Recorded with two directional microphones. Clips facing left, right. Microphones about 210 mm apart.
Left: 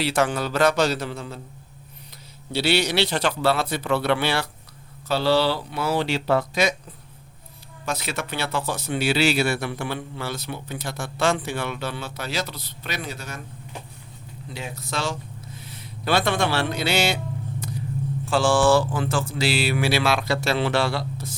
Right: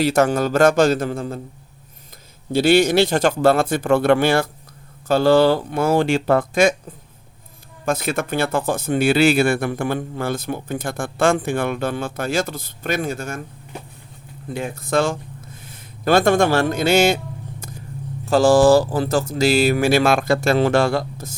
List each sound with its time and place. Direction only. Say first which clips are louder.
0.0 s speech: right 6 dB; 45° right (ahead or behind)
2.5 s speech: right 8 dB; 50° right (ahead or behind)
14.5 s speech: right 11 dB; 50° right (ahead or behind)
17.6 s vehicle: left 5 dB; 45° right (ahead or behind)
18.3 s speech: right 6 dB; 40° right (ahead or behind)